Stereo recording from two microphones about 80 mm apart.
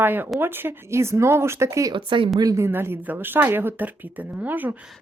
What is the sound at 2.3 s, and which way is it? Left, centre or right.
Speech, right.